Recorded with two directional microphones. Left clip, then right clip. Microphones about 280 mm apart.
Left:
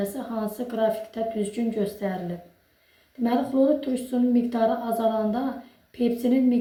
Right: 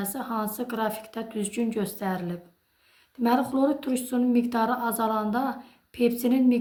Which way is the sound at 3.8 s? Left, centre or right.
Right.